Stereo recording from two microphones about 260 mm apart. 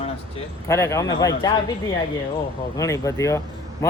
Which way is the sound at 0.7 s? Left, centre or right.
Centre.